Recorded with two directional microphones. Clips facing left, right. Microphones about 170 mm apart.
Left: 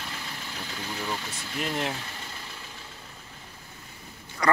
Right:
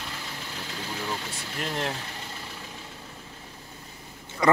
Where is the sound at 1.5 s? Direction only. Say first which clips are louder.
Left 1 dB; 5° left (ahead or behind).